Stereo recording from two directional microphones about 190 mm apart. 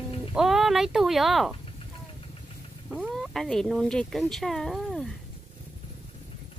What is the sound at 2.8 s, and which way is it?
Speech, centre (ahead or behind).